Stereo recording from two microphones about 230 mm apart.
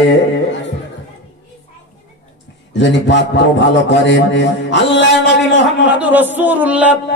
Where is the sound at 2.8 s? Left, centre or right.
Left.